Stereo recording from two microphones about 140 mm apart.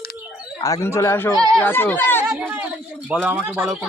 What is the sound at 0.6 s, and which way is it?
Speech, 20° left (ahead or behind).